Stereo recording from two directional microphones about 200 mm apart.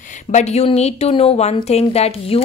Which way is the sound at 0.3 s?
35° left (ahead or behind).